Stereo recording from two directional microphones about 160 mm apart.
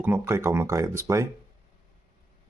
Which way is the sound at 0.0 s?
15° right (ahead or behind).